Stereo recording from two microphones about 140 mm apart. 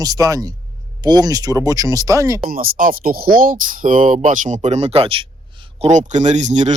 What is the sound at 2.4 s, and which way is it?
Speech, 90° right.